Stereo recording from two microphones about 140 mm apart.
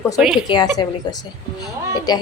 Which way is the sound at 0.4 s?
30° left (ahead or behind).